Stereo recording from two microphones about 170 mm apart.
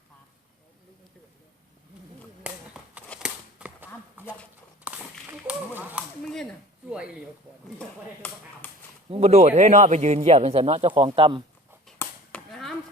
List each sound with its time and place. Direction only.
2.4 s a sound: 5° right (ahead or behind)
4.9 s walk: 10° right (ahead or behind)
5.5 s a sound: 10° right (ahead or behind)
6.2 s speech: 5° left (ahead or behind)
7.8 s speech: 10° left (ahead or behind)
9.0 s a man's voice: 40° right (ahead or behind)
11.9 s chop: 5° left (ahead or behind)